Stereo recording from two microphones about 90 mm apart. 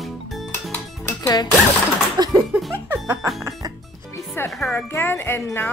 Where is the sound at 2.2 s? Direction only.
50° right (ahead or behind).